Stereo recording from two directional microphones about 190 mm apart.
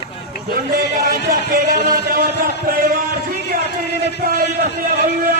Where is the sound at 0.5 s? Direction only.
50° right (ahead or behind).